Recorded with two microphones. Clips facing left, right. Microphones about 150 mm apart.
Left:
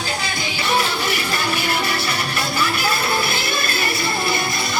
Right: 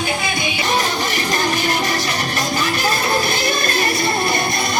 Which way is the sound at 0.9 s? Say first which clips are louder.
Right 2 dB; 40° right (ahead or behind).